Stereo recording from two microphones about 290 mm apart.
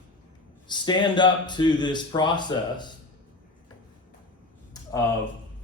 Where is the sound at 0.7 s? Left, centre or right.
Centre.